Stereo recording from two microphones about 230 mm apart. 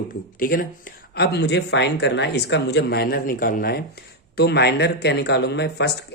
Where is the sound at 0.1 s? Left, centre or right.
Left.